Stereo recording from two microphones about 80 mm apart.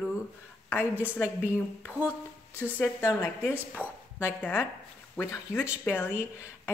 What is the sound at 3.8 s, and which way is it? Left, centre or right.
A woman's voice, left.